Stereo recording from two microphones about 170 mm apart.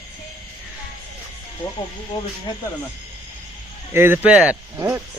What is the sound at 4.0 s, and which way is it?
Speech, 10° right (ahead or behind).